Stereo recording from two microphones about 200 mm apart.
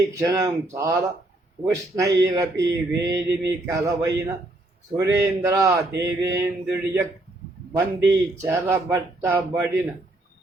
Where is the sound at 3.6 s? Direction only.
15° right (ahead or behind).